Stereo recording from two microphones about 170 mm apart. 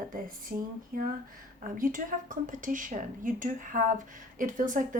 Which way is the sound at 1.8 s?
50° right (ahead or behind).